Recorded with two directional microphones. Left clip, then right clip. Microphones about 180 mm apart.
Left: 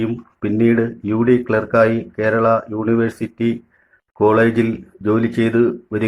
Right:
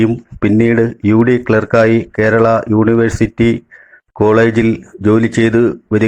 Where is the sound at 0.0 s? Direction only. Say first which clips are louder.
Right 8 dB; 40° right (ahead or behind).